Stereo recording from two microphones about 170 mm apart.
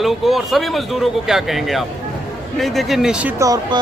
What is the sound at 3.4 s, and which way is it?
Speech, 20° right (ahead or behind).